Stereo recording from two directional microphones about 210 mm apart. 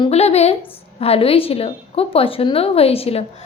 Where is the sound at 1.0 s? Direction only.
25° left (ahead or behind).